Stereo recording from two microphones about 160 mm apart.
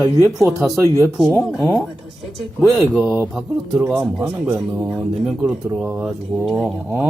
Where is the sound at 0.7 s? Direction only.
20° right (ahead or behind).